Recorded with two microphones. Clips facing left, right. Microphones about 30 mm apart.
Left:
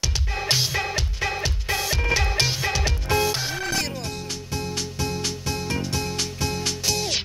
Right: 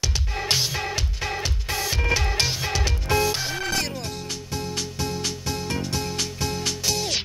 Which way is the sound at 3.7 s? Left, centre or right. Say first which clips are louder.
Even; centre.